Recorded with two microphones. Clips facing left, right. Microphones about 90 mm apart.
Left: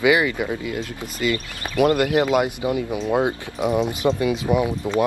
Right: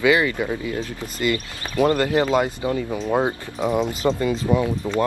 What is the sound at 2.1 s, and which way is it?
Speech, 15° left (ahead or behind).